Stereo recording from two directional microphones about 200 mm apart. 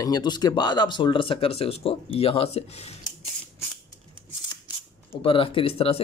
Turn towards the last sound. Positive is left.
turn(degrees=30)  # may be behind; listen again after turning